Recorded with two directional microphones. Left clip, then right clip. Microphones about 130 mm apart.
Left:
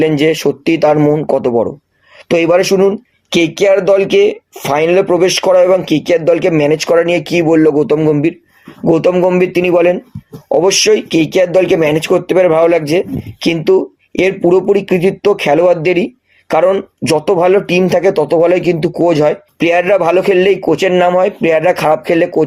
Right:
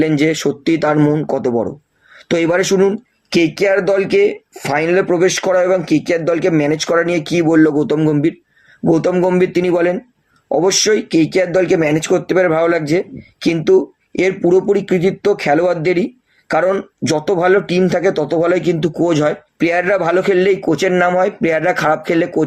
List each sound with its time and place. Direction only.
0.0 s speech: 30° left (ahead or behind)
3.2 s speech: 35° left (ahead or behind)
11.4 s speech: 40° left (ahead or behind)